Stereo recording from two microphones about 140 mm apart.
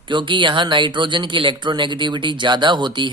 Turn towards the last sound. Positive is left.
turn(degrees=-35)  # may be behind; listen again after turning